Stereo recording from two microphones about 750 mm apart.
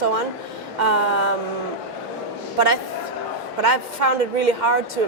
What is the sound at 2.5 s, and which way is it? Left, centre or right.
Speech, right.